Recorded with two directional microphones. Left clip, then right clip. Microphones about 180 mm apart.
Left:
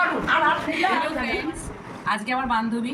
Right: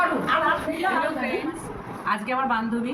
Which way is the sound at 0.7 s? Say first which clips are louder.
Left 2 dB; 5° right (ahead or behind).